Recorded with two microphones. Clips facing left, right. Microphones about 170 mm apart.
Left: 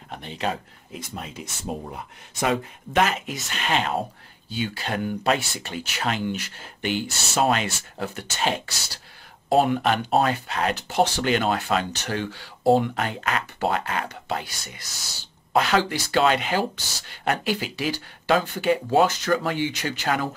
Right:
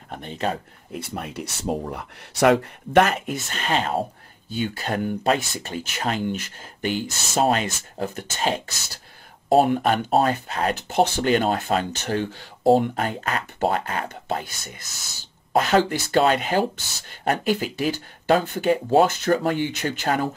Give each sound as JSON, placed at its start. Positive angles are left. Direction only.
{"t": 0.1, "sound": "speech", "side_deg": -45}
{"t": 0.9, "sound": "speech", "side_deg": -60}
{"t": 4.5, "sound": "speech", "side_deg": -50}
{"t": 11.1, "sound": "speech", "side_deg": -40}